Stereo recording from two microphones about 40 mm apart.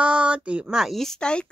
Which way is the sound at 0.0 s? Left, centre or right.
Right.